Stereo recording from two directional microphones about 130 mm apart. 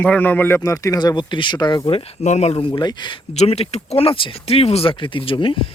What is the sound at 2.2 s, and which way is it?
Speech, 60° left (ahead or behind).